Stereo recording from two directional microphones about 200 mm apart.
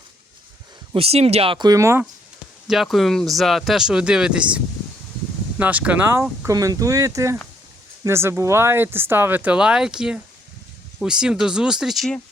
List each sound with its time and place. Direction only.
0.9 s speech: 30° right (ahead or behind); by 2.0 s 15° right (ahead or behind)
2.6 s speech: centre (ahead or behind)